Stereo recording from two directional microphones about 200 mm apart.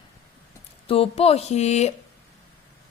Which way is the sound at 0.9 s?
30° left (ahead or behind).